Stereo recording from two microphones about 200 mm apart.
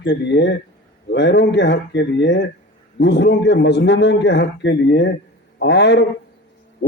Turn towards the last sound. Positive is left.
turn(degrees=60)  # may be behind; listen again after turning